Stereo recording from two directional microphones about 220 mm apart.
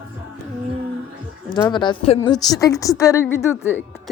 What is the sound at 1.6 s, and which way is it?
A woman's voice, 20° left (ahead or behind).